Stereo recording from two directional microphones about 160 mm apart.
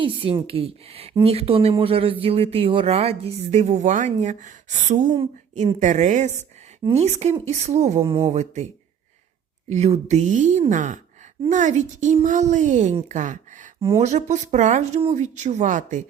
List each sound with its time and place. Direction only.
0.0 s speech: 35° right (ahead or behind); by 8.6 s 50° right (ahead or behind)
9.6 s speech: 40° right (ahead or behind)